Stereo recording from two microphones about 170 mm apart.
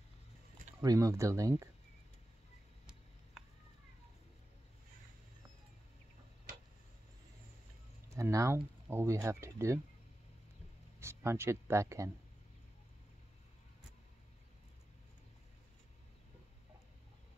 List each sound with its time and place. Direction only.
0.7 s speech: 20° right (ahead or behind)
8.1 s speech: 15° right (ahead or behind)
11.0 s speech: 15° right (ahead or behind)